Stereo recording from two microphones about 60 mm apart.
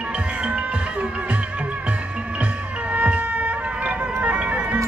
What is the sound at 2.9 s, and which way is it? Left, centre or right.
Music, right.